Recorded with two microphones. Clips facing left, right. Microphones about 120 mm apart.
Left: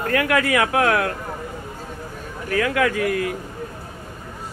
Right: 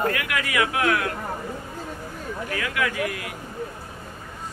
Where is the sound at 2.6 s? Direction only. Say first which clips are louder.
Left 8 dB; 40° left (ahead or behind).